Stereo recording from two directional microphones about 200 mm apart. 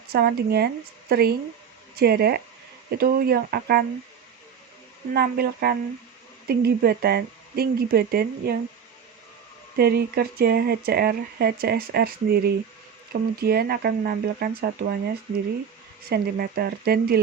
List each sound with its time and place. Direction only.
0.1 s speech: 50° right (ahead or behind)
5.1 s speech: 50° right (ahead or behind)
9.7 s speech: 50° right (ahead or behind)
16.0 s speech: 50° right (ahead or behind)